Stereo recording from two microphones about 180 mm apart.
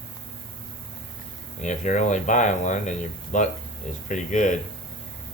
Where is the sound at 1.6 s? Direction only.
40° left (ahead or behind).